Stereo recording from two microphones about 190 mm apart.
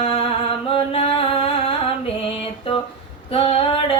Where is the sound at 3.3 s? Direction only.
30° left (ahead or behind).